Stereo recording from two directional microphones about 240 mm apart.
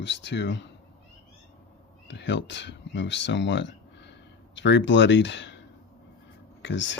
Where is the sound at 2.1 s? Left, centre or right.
Left.